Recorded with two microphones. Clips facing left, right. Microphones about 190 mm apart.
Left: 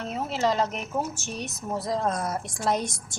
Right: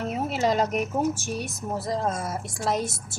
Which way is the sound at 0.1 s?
10° right (ahead or behind).